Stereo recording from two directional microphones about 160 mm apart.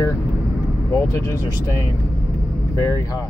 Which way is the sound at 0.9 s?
15° left (ahead or behind).